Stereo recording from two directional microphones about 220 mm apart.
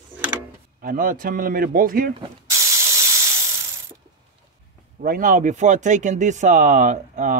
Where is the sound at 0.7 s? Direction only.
40° right (ahead or behind).